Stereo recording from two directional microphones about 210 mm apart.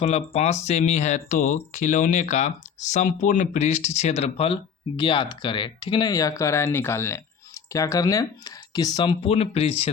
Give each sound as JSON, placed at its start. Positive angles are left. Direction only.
{"t": 0.0, "sound": "speech", "side_deg": 30}